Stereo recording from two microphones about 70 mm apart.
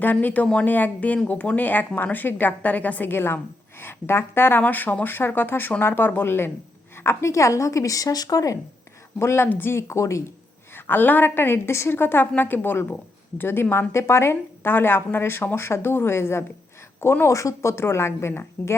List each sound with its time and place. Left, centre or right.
0.0 s a woman's voice: left
9.1 s a woman's voice: left
10.8 s a woman's voice: left